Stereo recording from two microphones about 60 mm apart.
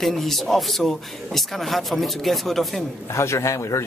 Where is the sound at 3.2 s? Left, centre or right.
Left.